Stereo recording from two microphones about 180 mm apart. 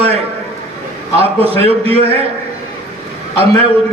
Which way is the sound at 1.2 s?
30° right (ahead or behind).